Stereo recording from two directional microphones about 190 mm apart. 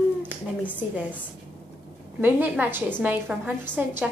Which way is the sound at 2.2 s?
10° right (ahead or behind).